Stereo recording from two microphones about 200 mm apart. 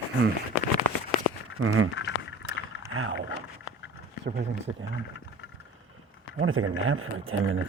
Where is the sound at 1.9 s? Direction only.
65° left (ahead or behind).